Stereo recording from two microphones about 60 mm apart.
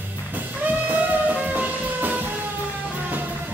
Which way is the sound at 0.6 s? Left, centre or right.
Right.